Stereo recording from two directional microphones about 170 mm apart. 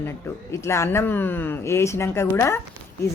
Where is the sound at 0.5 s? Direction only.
15° left (ahead or behind).